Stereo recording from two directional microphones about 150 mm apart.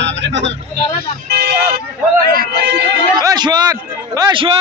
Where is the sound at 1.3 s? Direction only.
90° right.